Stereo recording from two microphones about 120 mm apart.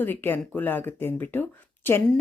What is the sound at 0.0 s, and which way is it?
Speech, 15° left (ahead or behind).